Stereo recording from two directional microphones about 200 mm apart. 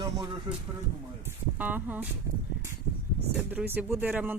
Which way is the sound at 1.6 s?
10° right (ahead or behind).